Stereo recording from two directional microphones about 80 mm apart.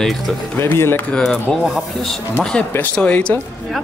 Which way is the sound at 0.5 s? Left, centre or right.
Left.